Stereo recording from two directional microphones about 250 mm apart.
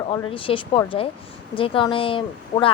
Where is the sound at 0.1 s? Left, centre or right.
Left.